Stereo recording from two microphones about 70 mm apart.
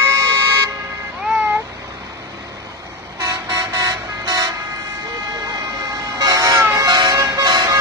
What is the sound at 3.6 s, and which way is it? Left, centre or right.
Vehicle, right.